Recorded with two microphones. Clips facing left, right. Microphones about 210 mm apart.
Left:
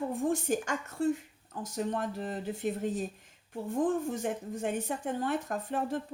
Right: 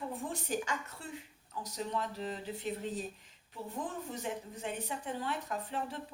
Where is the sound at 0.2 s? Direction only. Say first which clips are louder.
Left 9 dB; 50° left (ahead or behind).